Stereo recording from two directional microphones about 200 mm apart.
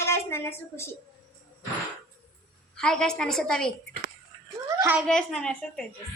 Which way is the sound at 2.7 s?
5° left (ahead or behind).